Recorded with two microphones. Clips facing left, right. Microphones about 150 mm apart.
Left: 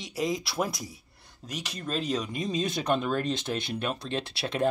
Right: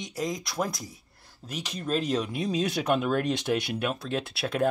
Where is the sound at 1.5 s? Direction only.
10° left (ahead or behind).